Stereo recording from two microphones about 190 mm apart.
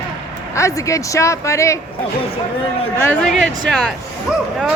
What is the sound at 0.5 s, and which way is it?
Speech, 15° left (ahead or behind).